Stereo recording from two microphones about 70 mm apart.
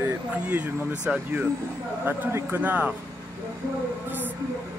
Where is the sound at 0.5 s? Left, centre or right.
Right.